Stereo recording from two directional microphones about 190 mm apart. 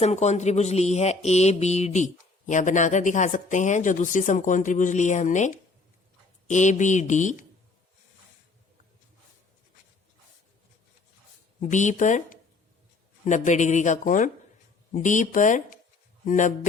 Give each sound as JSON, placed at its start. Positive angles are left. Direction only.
{"t": 0.0, "sound": "speech", "side_deg": 35}
{"t": 6.5, "sound": "speech", "side_deg": 40}
{"t": 11.6, "sound": "speech", "side_deg": 40}